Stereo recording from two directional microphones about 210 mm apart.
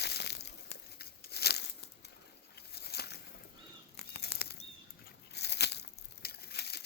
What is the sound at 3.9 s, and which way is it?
Bird flight, 50° left (ahead or behind).